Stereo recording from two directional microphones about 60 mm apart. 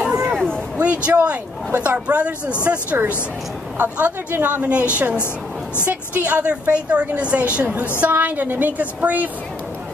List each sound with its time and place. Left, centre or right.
0.0 s a sound: centre
0.7 s a woman's voice: right
3.7 s a woman's voice: right
5.9 s a woman's voice: right